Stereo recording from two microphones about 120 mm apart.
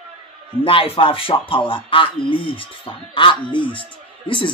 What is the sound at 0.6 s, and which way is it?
Speech, 50° left (ahead or behind).